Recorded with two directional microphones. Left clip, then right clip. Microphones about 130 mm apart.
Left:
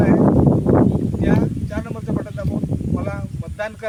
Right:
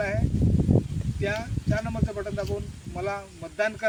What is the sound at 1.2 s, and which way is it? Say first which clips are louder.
Speech: left 6 dB; 20° left (ahead or behind).